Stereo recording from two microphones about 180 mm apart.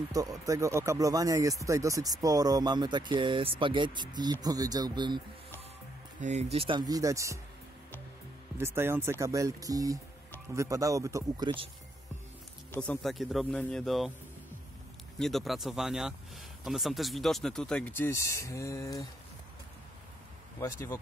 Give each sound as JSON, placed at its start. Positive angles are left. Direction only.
{"t": 0.1, "sound": "speech", "side_deg": -20}
{"t": 6.2, "sound": "speech", "side_deg": -35}
{"t": 6.9, "sound": "speech", "side_deg": -20}
{"t": 8.5, "sound": "speech", "side_deg": -15}
{"t": 12.7, "sound": "speech", "side_deg": 5}
{"t": 15.1, "sound": "speech", "side_deg": 0}
{"t": 20.6, "sound": "speech", "side_deg": 15}